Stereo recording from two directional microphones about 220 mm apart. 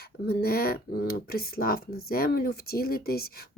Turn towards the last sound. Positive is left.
turn(degrees=45)  # may be behind; listen again after turning